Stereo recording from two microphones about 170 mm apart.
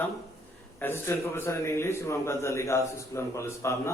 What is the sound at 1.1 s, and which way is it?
A man's voice, 15° left (ahead or behind).